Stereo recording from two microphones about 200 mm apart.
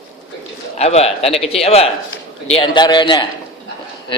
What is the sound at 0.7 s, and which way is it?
A man's voice, 30° left (ahead or behind).